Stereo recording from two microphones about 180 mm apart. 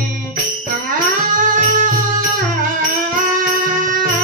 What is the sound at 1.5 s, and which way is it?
Music, 45° right (ahead or behind).